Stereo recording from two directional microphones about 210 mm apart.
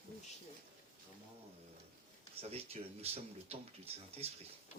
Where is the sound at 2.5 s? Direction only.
30° right (ahead or behind).